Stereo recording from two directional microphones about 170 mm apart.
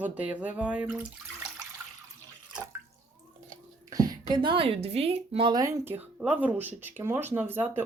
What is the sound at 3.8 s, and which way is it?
A woman's voice, 20° right (ahead or behind).